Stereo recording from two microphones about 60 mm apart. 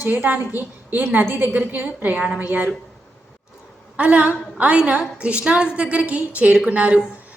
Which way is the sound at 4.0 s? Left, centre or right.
Right.